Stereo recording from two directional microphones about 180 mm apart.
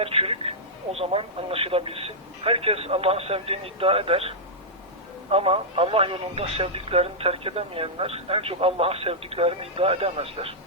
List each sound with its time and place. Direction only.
0.0 s speech: 30° right (ahead or behind)